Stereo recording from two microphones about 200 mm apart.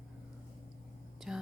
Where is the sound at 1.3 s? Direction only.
Centre (ahead or behind).